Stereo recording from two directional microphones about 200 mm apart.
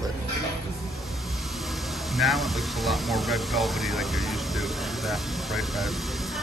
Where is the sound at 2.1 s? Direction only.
Centre (ahead or behind).